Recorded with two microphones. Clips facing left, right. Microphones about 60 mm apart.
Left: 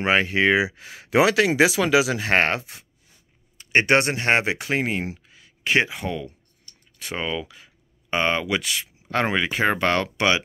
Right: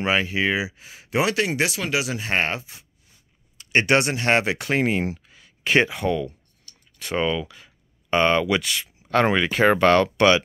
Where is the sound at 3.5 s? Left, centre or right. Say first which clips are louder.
Left 1 dB; left.